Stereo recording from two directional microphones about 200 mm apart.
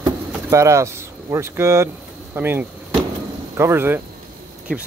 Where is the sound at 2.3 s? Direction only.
10° right (ahead or behind).